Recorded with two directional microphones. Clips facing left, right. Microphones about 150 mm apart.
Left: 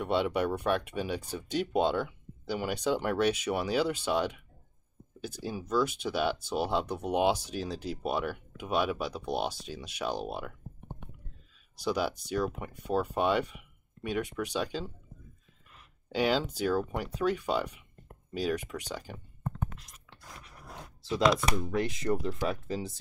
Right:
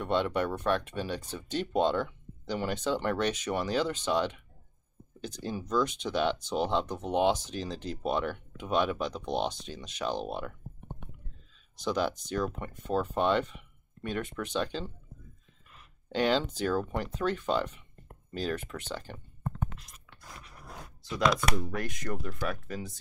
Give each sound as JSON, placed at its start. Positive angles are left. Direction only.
{"t": 0.0, "sound": "speech", "side_deg": 10}
{"t": 11.8, "sound": "speech", "side_deg": 10}
{"t": 16.1, "sound": "speech", "side_deg": 5}
{"t": 21.0, "sound": "a sound", "side_deg": 25}
{"t": 21.7, "sound": "speech", "side_deg": 25}